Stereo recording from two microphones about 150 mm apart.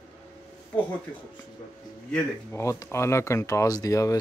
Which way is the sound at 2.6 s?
20° left (ahead or behind).